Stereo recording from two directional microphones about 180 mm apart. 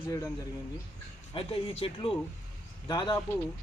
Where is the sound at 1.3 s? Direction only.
30° left (ahead or behind).